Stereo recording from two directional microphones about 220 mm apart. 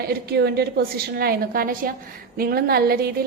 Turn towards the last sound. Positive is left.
turn(degrees=-45)  # may be behind; listen again after turning